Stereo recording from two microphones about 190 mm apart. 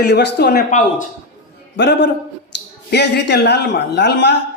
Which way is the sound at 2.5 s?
70° left (ahead or behind).